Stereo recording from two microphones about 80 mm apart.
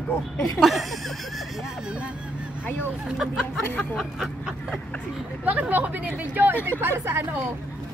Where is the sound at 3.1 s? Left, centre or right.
Centre.